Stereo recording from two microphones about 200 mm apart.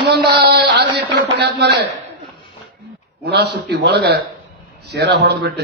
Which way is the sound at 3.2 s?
55° right (ahead or behind).